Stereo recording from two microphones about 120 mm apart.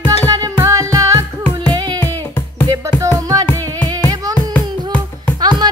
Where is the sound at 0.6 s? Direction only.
30° right (ahead or behind).